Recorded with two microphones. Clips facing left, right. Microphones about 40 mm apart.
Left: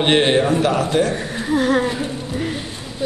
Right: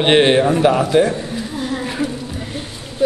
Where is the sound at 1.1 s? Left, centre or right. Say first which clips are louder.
Left 4 dB; left.